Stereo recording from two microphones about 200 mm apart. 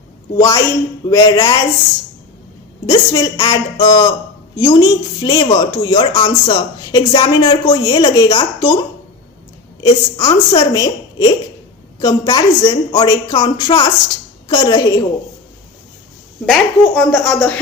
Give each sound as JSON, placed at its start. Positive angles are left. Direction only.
{"t": 0.3, "sound": "a woman's voice", "side_deg": 15}
{"t": 2.8, "sound": "speech", "side_deg": 20}
{"t": 9.8, "sound": "a woman's voice", "side_deg": 20}
{"t": 16.5, "sound": "speech", "side_deg": 0}